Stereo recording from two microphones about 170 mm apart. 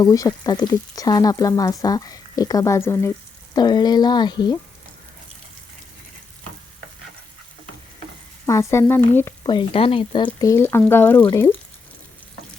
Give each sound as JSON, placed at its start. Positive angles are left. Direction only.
{"t": 0.0, "sound": "speech", "side_deg": 20}
{"t": 8.4, "sound": "frying", "side_deg": 15}
{"t": 9.4, "sound": "speech", "side_deg": 30}
{"t": 10.4, "sound": "frying", "side_deg": 15}